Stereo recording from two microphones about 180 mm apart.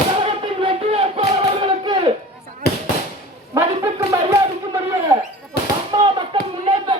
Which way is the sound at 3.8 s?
20° right (ahead or behind).